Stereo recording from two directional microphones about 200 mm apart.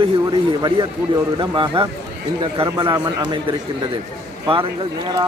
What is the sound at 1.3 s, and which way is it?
Speech, 25° right (ahead or behind).